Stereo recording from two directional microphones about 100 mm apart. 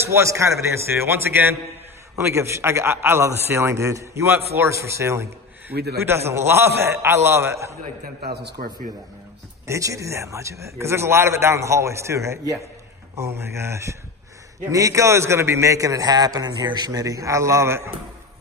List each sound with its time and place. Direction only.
0.1 s a man's voice: 30° right (ahead or behind)
9.7 s a man's voice: 30° right (ahead or behind)